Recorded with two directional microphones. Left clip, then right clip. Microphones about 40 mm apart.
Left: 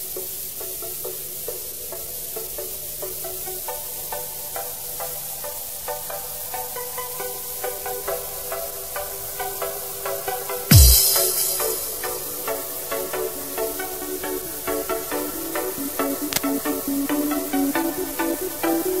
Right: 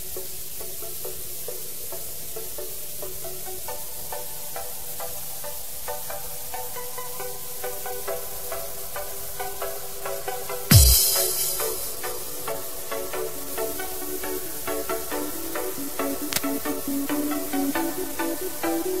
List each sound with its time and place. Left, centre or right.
7.2 s music: centre